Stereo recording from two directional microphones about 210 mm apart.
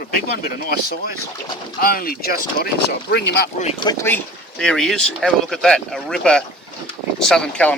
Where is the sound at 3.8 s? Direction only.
15° left (ahead or behind).